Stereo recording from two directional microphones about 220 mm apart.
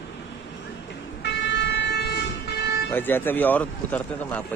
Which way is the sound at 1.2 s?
50° left (ahead or behind).